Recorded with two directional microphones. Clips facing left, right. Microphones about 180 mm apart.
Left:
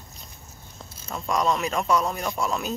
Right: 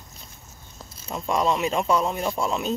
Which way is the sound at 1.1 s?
5° right (ahead or behind).